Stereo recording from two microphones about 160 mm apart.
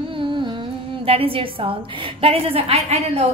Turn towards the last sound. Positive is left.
turn(degrees=-40)  # may be behind; listen again after turning